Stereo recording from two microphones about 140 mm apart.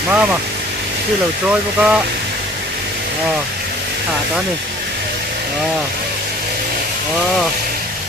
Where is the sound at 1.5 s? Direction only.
5° right (ahead or behind).